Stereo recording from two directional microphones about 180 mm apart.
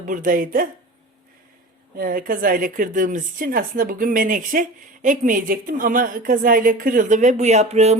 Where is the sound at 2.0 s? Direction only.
50° right (ahead or behind).